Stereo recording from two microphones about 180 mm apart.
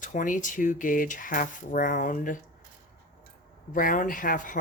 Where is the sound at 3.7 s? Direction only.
50° left (ahead or behind).